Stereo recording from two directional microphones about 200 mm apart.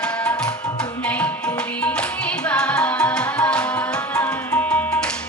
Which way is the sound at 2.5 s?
5° left (ahead or behind).